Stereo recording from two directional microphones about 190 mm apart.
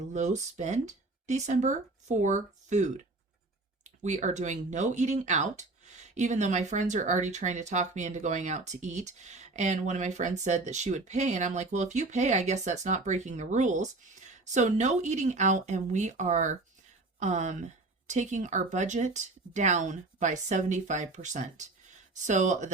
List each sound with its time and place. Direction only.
0.0 s speech: 40° right (ahead or behind)